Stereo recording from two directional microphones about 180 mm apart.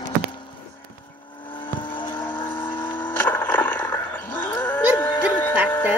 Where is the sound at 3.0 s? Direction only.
10° left (ahead or behind).